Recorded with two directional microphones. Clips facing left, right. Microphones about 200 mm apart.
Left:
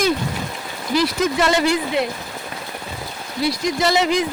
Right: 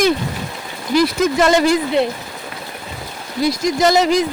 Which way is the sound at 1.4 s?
45° right (ahead or behind).